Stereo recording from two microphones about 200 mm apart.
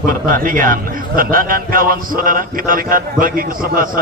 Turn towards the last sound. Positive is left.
turn(degrees=-45)  # may be behind; listen again after turning